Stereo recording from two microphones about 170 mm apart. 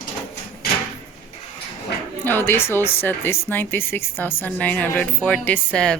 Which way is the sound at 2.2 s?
10° left (ahead or behind).